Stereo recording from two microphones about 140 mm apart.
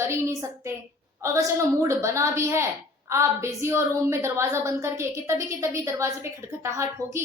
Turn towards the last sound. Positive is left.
turn(degrees=-20)  # may be behind; listen again after turning